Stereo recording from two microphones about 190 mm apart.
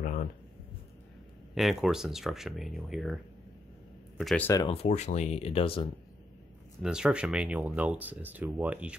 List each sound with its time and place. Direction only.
0.0 s a sound: 50° left (ahead or behind)
1.5 s speech: centre (ahead or behind)
4.2 s speech: centre (ahead or behind)
4.6 s speech: 35° left (ahead or behind)
6.8 s speech: 5° right (ahead or behind)